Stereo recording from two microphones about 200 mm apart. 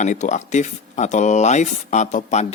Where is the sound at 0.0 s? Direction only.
35° left (ahead or behind).